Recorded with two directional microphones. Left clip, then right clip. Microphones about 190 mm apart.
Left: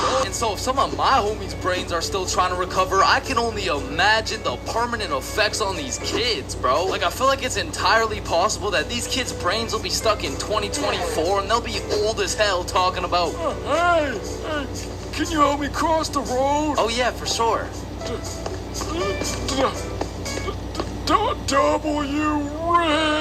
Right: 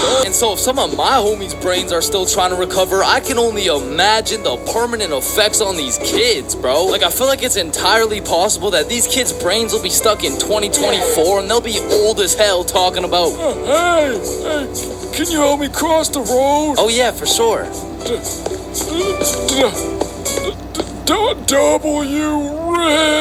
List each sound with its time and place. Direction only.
0.0 s speech: 20° right (ahead or behind)
18.9 s music: 20° right (ahead or behind)
21.5 s speech: 20° right (ahead or behind)